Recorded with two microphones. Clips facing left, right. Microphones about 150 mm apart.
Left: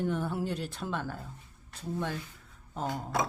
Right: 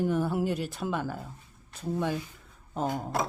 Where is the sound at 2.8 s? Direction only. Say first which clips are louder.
Right 4 dB; 20° right (ahead or behind).